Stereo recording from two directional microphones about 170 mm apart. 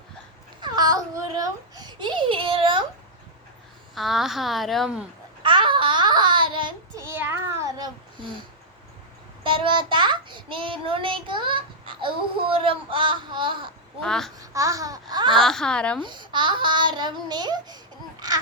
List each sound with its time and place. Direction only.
0.6 s babbling: 25° right (ahead or behind)
3.9 s a woman's voice: centre (ahead or behind)
5.4 s babbling: 30° right (ahead or behind)
7.0 s child singing: 10° right (ahead or behind)
9.4 s a child's voice: 30° right (ahead or behind)
14.0 s a woman's voice: centre (ahead or behind)
14.3 s a child's voice: 20° right (ahead or behind)
15.4 s a woman's voice: 5° left (ahead or behind)
16.0 s a child's voice: 25° right (ahead or behind)